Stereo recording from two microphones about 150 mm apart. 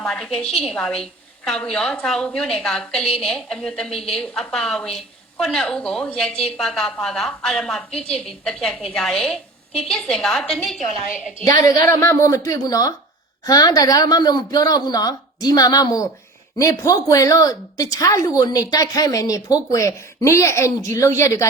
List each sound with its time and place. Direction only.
0.0 s a woman's voice: 5° left (ahead or behind)
11.5 s a woman's voice: 25° left (ahead or behind)